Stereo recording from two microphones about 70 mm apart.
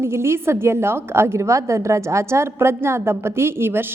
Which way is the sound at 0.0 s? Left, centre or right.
Right.